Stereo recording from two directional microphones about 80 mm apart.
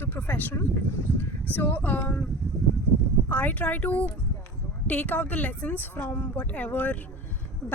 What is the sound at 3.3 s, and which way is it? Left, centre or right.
Speech, centre.